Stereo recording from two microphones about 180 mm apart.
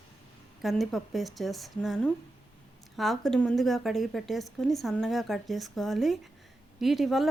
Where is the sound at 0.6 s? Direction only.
Centre (ahead or behind).